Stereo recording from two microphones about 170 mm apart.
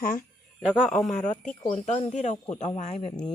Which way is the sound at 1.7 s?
40° left (ahead or behind).